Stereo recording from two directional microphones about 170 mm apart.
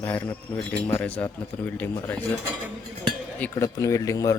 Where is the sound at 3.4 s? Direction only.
15° left (ahead or behind).